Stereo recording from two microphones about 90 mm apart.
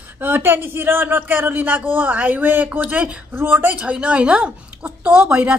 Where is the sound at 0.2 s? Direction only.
25° right (ahead or behind).